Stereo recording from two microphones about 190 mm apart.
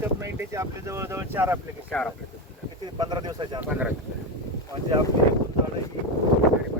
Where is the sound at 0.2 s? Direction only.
15° right (ahead or behind).